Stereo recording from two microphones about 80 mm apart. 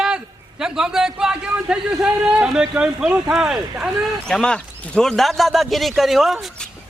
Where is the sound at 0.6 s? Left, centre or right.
Centre.